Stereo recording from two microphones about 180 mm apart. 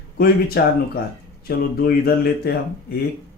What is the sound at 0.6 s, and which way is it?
Speech, 65° left (ahead or behind).